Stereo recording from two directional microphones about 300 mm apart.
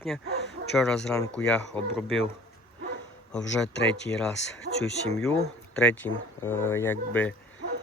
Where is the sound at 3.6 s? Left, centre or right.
Centre.